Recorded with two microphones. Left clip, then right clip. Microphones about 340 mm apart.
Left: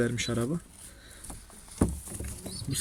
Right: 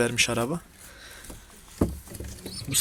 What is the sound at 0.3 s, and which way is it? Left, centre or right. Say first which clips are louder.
Speech: right 5 dB; right.